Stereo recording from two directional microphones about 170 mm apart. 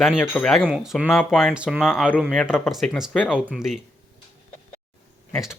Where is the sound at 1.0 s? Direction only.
10° left (ahead or behind).